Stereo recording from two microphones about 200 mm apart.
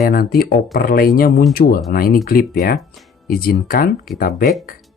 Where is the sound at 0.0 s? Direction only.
50° left (ahead or behind).